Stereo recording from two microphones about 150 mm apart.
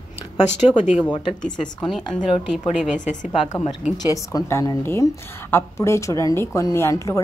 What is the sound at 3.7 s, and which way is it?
Speech, 5° right (ahead or behind).